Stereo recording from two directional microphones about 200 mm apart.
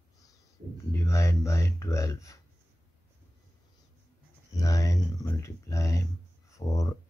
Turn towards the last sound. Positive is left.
turn(degrees=15)  # may be behind; listen again after turning